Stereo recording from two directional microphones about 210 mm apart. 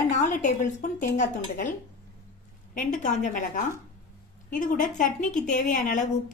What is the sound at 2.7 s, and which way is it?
A woman's voice, 35° left (ahead or behind).